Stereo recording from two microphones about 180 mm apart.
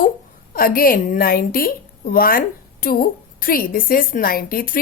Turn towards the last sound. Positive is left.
turn(degrees=50)  # may be behind; listen again after turning